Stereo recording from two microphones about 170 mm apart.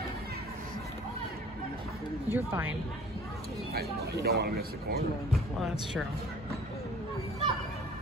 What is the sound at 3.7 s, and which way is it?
A man's voice, 65° right (ahead or behind).